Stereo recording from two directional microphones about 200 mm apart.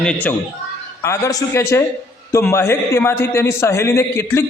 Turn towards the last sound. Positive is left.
turn(degrees=15)  # may be behind; listen again after turning